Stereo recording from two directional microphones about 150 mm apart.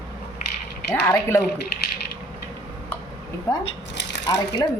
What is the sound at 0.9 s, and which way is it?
Speech, 15° left (ahead or behind).